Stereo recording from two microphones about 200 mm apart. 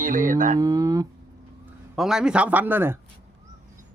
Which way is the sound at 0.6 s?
20° right (ahead or behind).